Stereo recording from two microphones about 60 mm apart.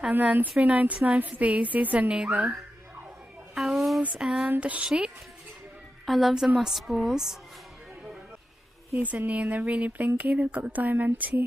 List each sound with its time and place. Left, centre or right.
0.1 s speech: right
3.5 s a sound: centre
4.2 s speech: centre
4.5 s speech: right
6.0 s a woman's voice: centre
9.0 s speech: right